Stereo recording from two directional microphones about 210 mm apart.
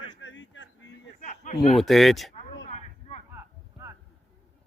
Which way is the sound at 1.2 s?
35° left (ahead or behind).